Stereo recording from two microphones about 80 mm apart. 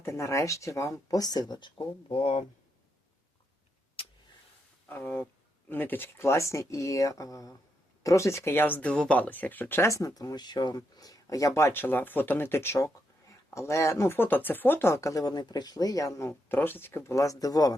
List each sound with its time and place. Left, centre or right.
0.0 s speech: left
4.9 s speech: left
9.9 s speech: left
11.7 s speech: left
16.5 s speech: left
17.1 s speech: left